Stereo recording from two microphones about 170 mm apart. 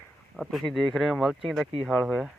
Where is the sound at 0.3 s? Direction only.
Centre (ahead or behind).